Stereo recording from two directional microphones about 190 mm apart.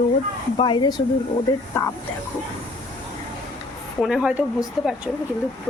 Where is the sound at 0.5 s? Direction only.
25° left (ahead or behind).